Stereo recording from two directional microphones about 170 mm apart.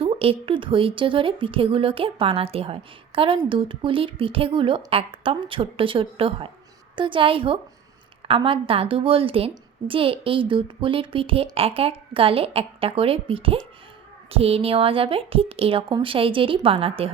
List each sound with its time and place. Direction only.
0.0 s a woman's voice: 35° right (ahead or behind)